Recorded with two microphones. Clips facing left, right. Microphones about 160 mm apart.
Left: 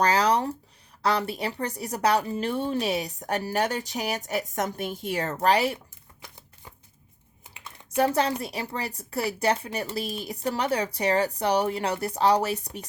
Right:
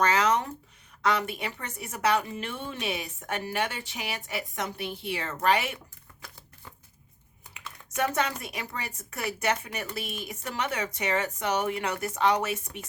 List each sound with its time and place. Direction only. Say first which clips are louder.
0.0 s a sound: left 2 dB; 35° left (ahead or behind)
1.0 s a woman's voice: left 2 dB; 35° left (ahead or behind)
7.6 s typing: right 1 dB; 30° left (ahead or behind)
7.9 s a woman's voice: left 5 dB; 30° left (ahead or behind)